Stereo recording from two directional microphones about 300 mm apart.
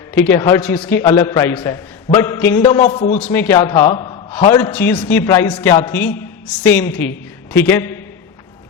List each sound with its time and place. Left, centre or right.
0.1 s a man's voice: centre
2.8 s a man's voice: left
3.2 s a man's voice: centre
6.9 s a woman's voice: left
7.5 s a man's voice: centre